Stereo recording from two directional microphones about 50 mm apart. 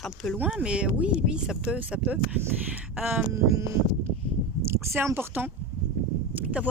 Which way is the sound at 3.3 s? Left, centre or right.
Right.